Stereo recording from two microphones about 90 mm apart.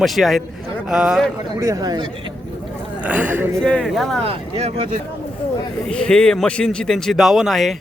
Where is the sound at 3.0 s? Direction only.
15° right (ahead or behind).